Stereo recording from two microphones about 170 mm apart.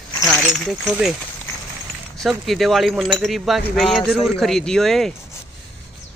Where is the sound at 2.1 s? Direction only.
Centre (ahead or behind).